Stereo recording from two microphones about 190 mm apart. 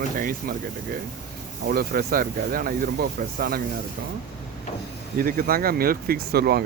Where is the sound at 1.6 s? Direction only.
50° right (ahead or behind).